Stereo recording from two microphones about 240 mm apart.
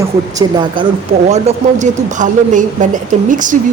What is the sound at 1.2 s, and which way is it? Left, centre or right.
Speech, right.